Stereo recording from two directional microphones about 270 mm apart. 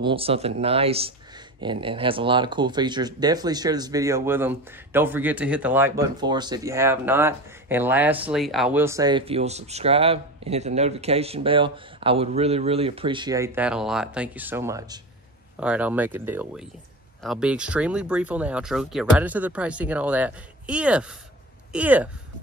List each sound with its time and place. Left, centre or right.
0.0 s speech: right